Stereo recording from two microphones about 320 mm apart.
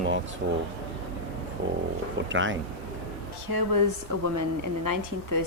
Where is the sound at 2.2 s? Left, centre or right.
Right.